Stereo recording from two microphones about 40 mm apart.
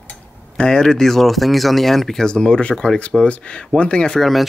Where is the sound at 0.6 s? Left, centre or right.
Centre.